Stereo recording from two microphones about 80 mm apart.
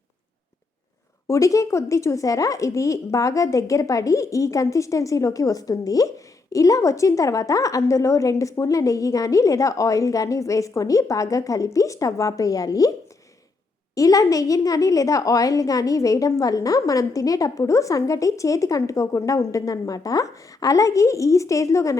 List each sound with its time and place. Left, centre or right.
1.3 s speech: left
13.9 s speech: left